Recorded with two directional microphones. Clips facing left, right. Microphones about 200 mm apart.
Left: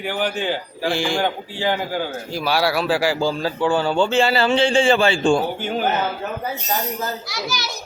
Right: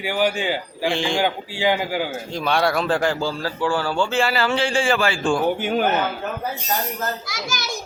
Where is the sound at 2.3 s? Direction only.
5° left (ahead or behind).